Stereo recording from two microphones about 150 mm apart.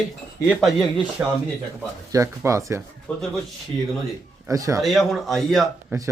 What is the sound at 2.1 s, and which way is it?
Speech, 20° right (ahead or behind).